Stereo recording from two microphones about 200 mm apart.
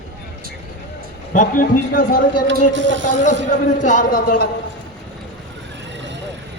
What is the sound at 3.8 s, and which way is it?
Speech, 40° left (ahead or behind).